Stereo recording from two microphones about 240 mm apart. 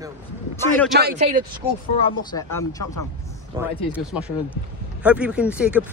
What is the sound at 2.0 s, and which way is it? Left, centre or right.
Speech, left.